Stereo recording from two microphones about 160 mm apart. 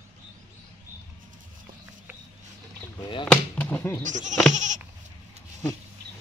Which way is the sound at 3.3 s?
10° left (ahead or behind).